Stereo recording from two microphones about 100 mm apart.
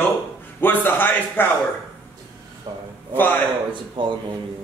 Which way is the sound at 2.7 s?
45° right (ahead or behind).